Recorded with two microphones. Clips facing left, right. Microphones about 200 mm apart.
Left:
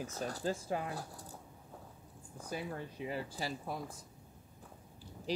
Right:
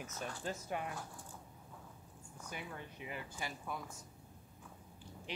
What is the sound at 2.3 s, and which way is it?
Speech, 35° left (ahead or behind).